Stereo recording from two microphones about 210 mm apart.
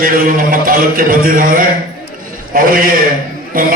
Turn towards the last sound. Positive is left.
turn(degrees=-40)  # may be behind; listen again after turning